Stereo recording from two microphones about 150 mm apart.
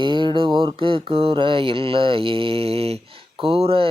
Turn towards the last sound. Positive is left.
turn(degrees=-40)  # may be behind; listen again after turning